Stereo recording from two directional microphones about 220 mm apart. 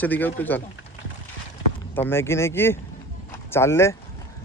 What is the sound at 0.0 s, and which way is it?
Speech, 10° left (ahead or behind).